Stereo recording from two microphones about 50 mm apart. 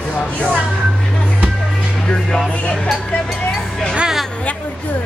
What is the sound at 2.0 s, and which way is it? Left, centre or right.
Speech, centre.